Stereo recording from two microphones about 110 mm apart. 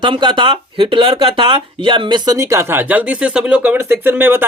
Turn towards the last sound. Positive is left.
turn(degrees=-20)  # may be behind; listen again after turning